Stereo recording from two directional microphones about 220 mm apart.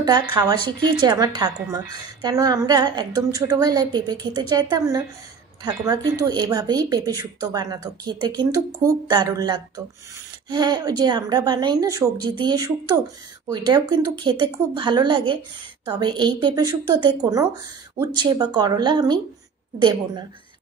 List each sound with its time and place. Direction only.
0.0 s a woman's voice: 20° right (ahead or behind)